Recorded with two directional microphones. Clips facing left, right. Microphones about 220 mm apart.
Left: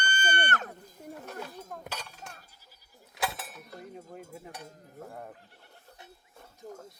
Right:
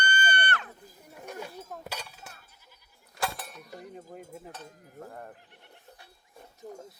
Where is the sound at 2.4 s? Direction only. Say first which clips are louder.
Even; 35° left (ahead or behind).